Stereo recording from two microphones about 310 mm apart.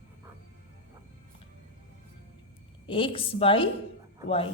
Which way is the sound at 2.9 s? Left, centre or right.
Centre.